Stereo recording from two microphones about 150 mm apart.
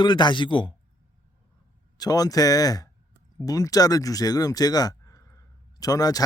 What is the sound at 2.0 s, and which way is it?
Speech, 25° left (ahead or behind).